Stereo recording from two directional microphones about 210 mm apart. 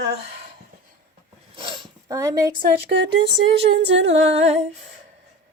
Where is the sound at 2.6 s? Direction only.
55° right (ahead or behind).